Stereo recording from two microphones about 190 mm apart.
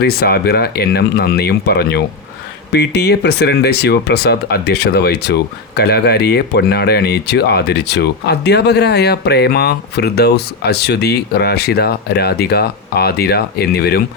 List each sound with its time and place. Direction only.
0.0 s speech: 55° left (ahead or behind)